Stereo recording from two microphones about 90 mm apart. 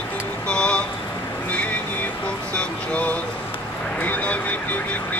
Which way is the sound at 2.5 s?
15° left (ahead or behind).